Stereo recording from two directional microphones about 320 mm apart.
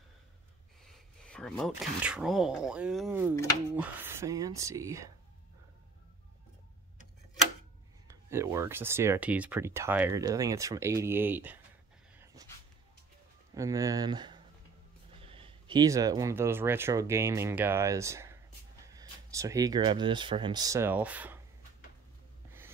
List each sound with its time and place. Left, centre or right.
0.8 s speech: centre
8.1 s speech: centre
13.6 s speech: centre